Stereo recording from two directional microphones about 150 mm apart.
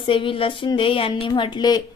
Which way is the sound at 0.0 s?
35° left (ahead or behind).